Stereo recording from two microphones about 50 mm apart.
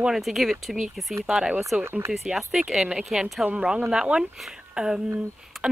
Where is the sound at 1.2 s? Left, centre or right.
Centre.